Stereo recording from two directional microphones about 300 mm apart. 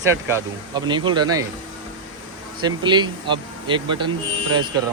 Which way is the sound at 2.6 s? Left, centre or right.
Centre.